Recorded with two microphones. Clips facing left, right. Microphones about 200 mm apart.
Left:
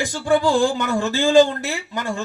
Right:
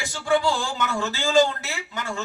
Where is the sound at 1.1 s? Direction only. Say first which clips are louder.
Left 6 dB; 55° left (ahead or behind).